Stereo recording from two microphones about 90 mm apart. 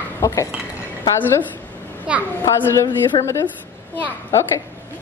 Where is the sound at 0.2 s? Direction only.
35° left (ahead or behind).